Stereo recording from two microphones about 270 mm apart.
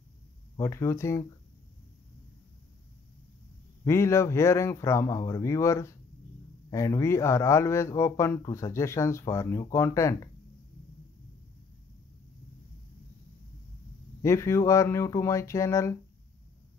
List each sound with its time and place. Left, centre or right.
0.6 s speech: centre
3.8 s speech: centre
14.2 s speech: centre